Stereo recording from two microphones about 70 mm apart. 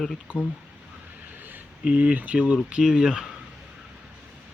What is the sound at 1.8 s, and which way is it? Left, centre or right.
Speech, centre.